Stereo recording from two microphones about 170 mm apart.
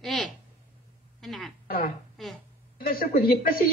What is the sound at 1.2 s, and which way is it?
Speech, centre (ahead or behind).